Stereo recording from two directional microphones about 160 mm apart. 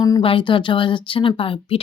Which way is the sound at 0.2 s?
35° left (ahead or behind).